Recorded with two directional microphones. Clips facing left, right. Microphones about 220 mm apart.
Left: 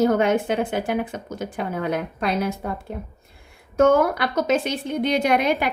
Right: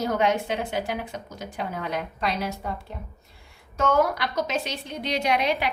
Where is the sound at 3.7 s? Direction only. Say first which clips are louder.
Left 6 dB; 50° left (ahead or behind).